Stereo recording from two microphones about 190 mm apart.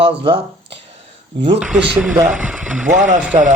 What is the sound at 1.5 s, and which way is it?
Speech, 5° right (ahead or behind).